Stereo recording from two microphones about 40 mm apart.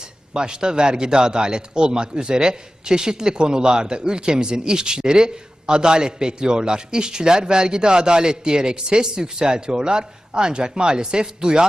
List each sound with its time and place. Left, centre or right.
0.3 s a man's voice: centre